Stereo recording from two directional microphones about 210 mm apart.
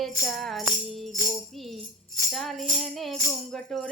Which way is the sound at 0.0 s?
Centre (ahead or behind).